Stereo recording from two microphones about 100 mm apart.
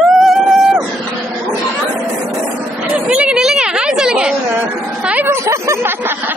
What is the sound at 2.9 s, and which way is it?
Chatter, 10° right (ahead or behind).